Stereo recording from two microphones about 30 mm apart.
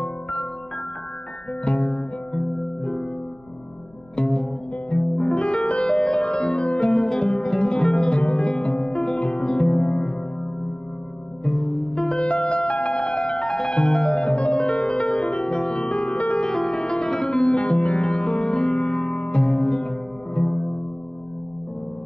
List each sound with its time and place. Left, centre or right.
1.6 s music: left
5.1 s music: left
5.9 s music: left
7.2 s music: left
9.7 s music: left
11.4 s music: left
12.3 s music: left
15.4 s music: left
16.4 s music: centre
17.6 s music: left